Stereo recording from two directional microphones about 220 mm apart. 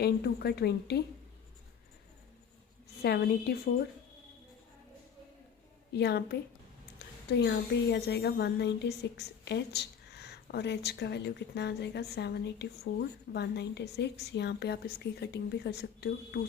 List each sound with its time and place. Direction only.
0.0 s a woman's voice: 45° left (ahead or behind)
3.0 s a woman's voice: 45° left (ahead or behind)
5.9 s a woman's voice: 50° left (ahead or behind)
7.3 s a woman's voice: 50° left (ahead or behind)